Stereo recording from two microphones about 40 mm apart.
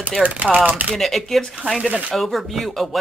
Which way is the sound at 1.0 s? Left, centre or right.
Centre.